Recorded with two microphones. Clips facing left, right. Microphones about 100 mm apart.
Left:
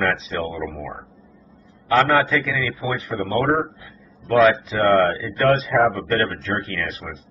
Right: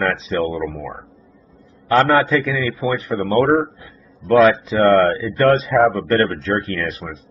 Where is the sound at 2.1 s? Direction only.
40° right (ahead or behind).